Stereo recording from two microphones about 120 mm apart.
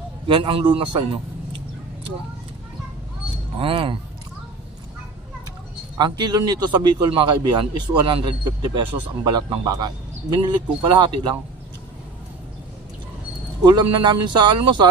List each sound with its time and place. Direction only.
0.3 s a man's voice: 45° right (ahead or behind)
3.5 s a man's voice: 45° right (ahead or behind)
5.9 s a man's voice: 40° right (ahead or behind)
13.7 s a man's voice: 40° right (ahead or behind)